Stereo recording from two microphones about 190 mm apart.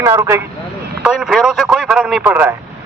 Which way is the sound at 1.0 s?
Centre (ahead or behind).